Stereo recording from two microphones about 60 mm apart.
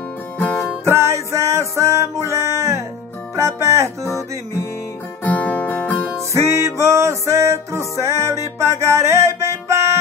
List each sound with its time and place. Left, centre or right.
0.8 s music: right
5.2 s music: left
6.1 s music: right